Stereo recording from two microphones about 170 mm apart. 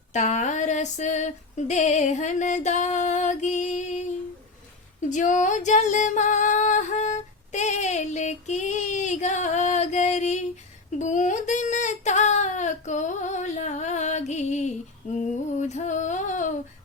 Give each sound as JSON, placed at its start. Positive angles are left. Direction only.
{"t": 0.1, "sound": "female singing", "side_deg": 45}
{"t": 5.0, "sound": "music", "side_deg": 45}
{"t": 10.9, "sound": "a sound", "side_deg": 45}